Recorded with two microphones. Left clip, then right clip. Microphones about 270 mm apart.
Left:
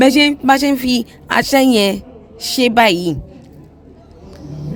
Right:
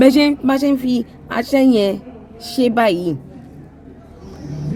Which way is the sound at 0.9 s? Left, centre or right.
Left.